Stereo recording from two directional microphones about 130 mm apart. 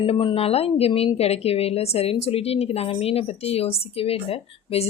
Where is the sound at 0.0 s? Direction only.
40° left (ahead or behind).